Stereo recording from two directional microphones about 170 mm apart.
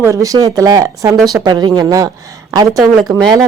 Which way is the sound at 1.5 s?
25° right (ahead or behind).